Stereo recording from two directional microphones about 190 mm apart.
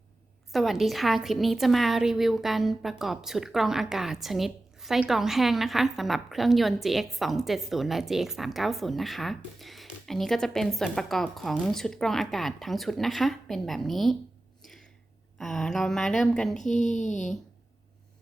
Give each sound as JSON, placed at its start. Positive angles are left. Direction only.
{"t": 0.5, "sound": "a woman's voice", "side_deg": 0}
{"t": 14.6, "sound": "a sound", "side_deg": 0}
{"t": 15.4, "sound": "a woman's voice", "side_deg": 0}
{"t": 17.0, "sound": "speech", "side_deg": 40}